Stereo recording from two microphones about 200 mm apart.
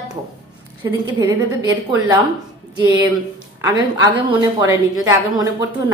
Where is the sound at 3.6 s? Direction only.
20° right (ahead or behind).